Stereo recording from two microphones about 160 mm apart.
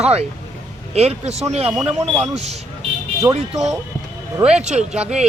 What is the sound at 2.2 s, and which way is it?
Speech, 45° right (ahead or behind).